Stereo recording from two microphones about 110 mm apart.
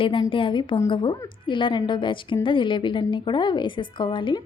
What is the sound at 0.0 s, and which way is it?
A woman's voice, 55° left (ahead or behind).